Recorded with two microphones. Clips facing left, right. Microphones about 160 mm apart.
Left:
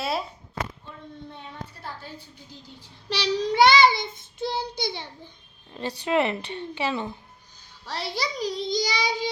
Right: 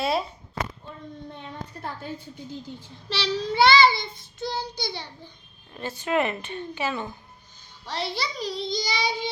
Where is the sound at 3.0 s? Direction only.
15° left (ahead or behind).